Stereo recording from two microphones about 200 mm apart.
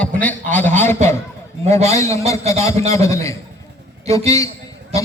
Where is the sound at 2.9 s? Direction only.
15° left (ahead or behind).